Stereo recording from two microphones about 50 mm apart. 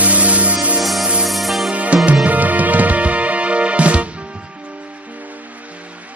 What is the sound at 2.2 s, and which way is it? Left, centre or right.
Music, right.